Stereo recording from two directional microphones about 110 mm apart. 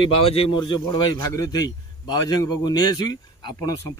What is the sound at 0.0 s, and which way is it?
Speech, 55° left (ahead or behind).